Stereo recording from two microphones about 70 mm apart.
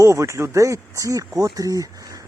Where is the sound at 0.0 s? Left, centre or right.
Right.